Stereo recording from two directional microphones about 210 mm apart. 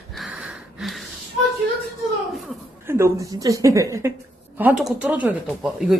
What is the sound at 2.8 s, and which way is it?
A woman's voice, 15° right (ahead or behind).